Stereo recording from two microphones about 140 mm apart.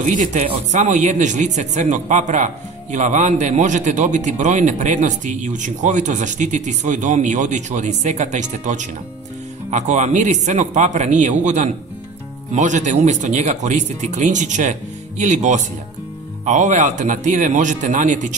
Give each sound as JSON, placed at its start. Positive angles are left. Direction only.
{"t": 0.0, "sound": "a man's voice", "side_deg": -65}